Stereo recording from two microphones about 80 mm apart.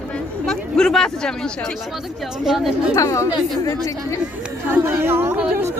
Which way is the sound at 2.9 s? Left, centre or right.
Left.